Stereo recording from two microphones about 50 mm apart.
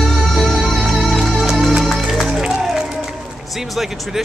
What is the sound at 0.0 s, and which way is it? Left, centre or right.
Music, centre.